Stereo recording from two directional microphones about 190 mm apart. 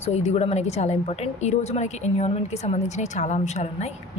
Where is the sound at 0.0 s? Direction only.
35° left (ahead or behind).